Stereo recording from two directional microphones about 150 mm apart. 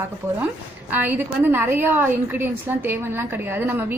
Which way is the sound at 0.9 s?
15° right (ahead or behind).